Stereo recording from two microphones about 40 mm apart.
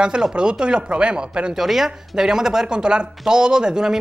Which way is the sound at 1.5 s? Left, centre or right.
Centre.